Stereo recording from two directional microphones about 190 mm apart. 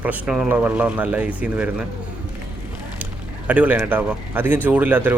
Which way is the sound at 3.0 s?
10° right (ahead or behind).